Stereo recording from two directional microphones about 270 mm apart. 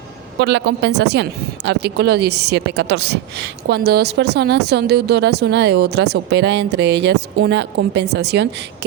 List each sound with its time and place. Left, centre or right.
0.3 s speech: right